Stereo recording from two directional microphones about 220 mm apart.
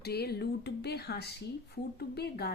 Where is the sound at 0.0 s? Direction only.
45° left (ahead or behind).